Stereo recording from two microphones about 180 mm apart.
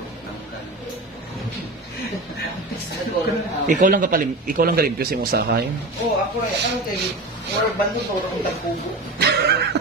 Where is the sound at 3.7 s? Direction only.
50° right (ahead or behind).